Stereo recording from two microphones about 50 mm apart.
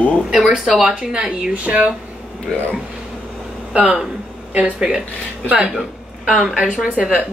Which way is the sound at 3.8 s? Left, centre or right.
Centre.